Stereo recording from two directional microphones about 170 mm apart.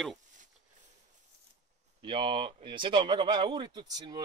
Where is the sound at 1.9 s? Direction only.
30° right (ahead or behind).